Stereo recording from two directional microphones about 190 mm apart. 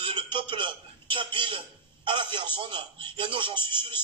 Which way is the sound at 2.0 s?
25° right (ahead or behind).